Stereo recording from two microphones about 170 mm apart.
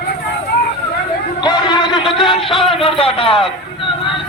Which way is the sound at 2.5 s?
30° left (ahead or behind).